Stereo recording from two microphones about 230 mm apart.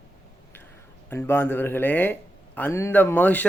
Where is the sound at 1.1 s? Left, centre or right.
Centre.